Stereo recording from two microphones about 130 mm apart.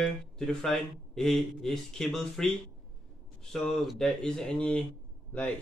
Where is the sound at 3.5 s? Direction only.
5° left (ahead or behind).